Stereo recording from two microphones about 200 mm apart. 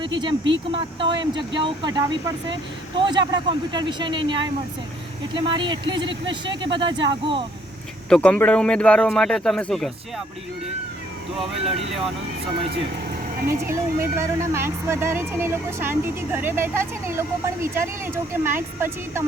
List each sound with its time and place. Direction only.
0.0 s speech: 25° right (ahead or behind)
8.1 s speech: 5° left (ahead or behind)
13.5 s speech: 15° right (ahead or behind)